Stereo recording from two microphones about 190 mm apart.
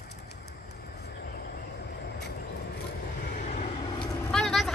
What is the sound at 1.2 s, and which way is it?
Vehicle, 55° left (ahead or behind).